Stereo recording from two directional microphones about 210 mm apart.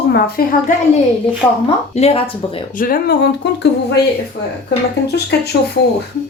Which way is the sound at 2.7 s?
40° left (ahead or behind).